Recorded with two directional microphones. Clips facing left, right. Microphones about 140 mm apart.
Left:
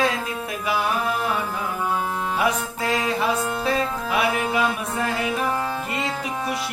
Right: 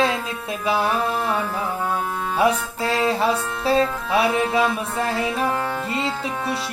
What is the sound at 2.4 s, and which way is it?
Music, 30° right (ahead or behind).